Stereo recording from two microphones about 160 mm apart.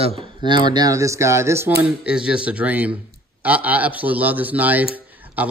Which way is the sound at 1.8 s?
5° right (ahead or behind).